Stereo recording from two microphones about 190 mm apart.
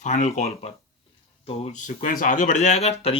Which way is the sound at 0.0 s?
40° left (ahead or behind).